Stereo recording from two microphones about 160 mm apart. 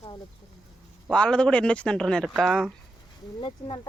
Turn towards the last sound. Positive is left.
turn(degrees=30)  # may be behind; listen again after turning